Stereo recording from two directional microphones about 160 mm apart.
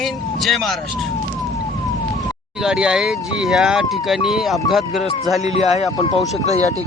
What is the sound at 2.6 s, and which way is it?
Speech, 5° right (ahead or behind).